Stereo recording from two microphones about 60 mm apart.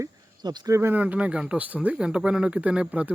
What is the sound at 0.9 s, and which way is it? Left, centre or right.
Speech, right.